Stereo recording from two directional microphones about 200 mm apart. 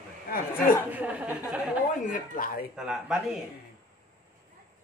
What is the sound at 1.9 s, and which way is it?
Speech, 40° left (ahead or behind).